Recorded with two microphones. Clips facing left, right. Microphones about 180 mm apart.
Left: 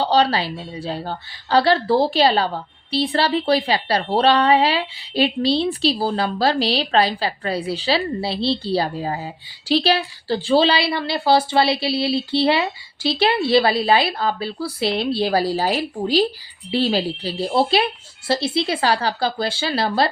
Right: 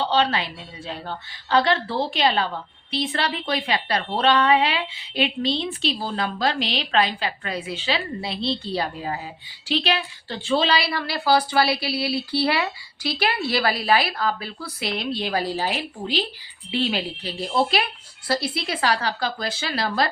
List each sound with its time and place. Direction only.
0.0 s a woman's voice: 40° left (ahead or behind)